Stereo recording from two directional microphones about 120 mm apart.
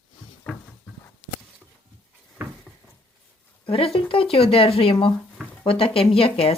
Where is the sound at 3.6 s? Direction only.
50° left (ahead or behind).